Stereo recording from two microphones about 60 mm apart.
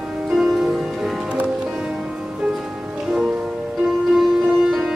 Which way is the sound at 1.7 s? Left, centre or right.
Centre.